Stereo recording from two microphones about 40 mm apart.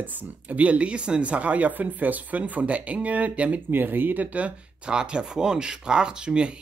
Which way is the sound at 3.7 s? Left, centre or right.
Right.